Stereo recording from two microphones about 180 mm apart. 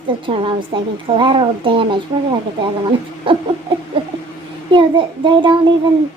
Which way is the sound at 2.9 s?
30° right (ahead or behind).